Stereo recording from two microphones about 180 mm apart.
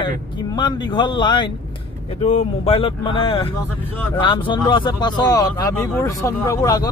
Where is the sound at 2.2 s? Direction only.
35° left (ahead or behind).